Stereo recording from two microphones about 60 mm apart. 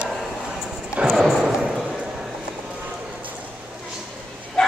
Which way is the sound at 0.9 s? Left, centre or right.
Centre.